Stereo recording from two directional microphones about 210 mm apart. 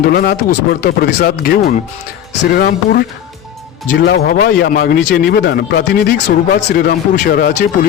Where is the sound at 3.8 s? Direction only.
55° left (ahead or behind).